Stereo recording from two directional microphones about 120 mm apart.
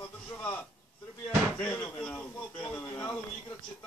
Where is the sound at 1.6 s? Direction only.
10° left (ahead or behind).